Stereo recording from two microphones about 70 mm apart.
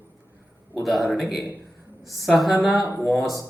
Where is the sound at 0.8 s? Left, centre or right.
Centre.